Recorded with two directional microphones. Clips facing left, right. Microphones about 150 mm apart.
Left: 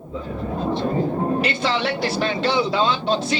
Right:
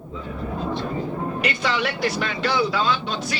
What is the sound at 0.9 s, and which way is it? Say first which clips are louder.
Speech: left 6 dB; 35° left (ahead or behind).